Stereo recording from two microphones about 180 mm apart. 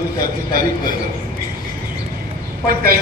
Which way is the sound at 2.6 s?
55° right (ahead or behind).